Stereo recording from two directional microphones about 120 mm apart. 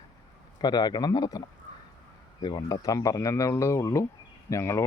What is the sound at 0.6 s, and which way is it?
Speech, 35° left (ahead or behind).